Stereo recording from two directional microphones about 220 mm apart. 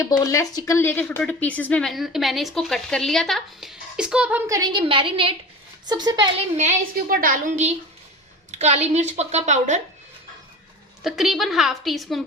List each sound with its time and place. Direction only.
0.2 s a woman's voice: 15° left (ahead or behind); by 6.2 s 20° right (ahead or behind)
6.6 s a woman's voice: 35° right (ahead or behind)
11.0 s a woman's voice: centre (ahead or behind)